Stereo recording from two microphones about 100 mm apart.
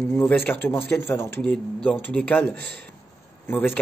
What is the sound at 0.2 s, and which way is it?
Speech, 20° left (ahead or behind).